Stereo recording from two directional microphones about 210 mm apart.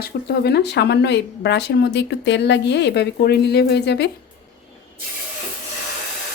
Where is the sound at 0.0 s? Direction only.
50° left (ahead or behind).